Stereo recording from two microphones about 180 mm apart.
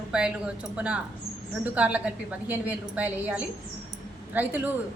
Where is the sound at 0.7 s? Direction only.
5° right (ahead or behind).